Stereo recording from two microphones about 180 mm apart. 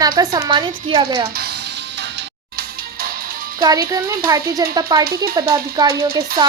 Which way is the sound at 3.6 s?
20° right (ahead or behind).